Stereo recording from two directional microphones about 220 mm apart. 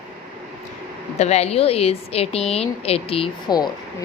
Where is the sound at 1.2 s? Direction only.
30° left (ahead or behind).